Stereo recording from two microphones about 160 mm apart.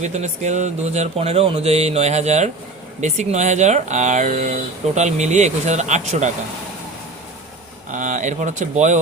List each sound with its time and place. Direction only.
0.0 s speech: 45° right (ahead or behind)
7.9 s speech: 55° right (ahead or behind)